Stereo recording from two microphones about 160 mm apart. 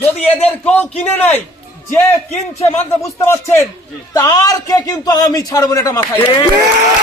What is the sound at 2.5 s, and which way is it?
Speech, 40° left (ahead or behind).